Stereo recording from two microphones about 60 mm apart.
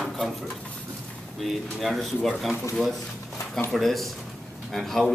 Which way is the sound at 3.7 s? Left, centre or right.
Centre.